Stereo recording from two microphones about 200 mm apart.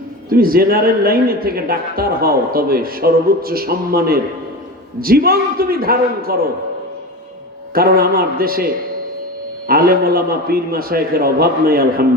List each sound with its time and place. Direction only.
0.3 s speech: 45° right (ahead or behind)
7.7 s speech: 50° right (ahead or behind)
9.6 s speech: 50° right (ahead or behind)